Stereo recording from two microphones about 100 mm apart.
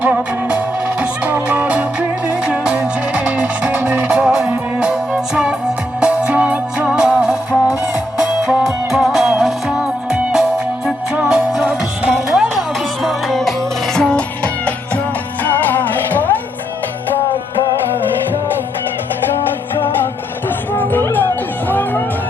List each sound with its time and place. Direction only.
0.0 s music: 15° right (ahead or behind); by 16.3 s 20° left (ahead or behind)
20.7 s music: 20° left (ahead or behind)